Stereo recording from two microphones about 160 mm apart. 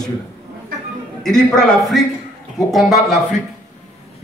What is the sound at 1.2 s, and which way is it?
A man's voice, 5° left (ahead or behind).